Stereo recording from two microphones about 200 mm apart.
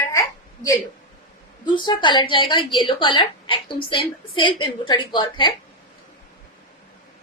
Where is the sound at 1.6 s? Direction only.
20° left (ahead or behind).